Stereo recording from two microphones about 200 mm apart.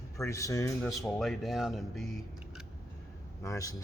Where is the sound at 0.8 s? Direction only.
Centre (ahead or behind).